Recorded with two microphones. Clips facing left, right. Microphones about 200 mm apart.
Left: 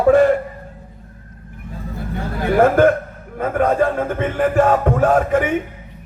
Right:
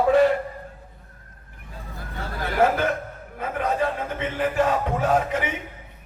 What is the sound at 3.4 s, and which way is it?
A man's voice, 50° left (ahead or behind).